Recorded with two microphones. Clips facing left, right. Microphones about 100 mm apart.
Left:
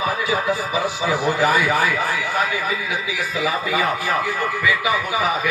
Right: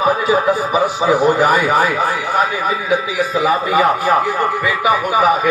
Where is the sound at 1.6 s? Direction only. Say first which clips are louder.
Right 5 dB; 15° right (ahead or behind).